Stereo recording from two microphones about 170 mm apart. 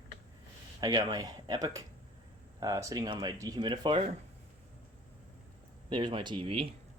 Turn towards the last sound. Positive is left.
turn(degrees=-35)  # may be behind; listen again after turning